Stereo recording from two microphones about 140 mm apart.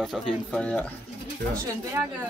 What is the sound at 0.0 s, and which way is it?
Speech, 5° left (ahead or behind).